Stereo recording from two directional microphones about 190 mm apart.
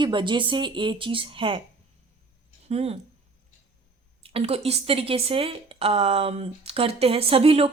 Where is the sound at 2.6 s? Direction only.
30° right (ahead or behind).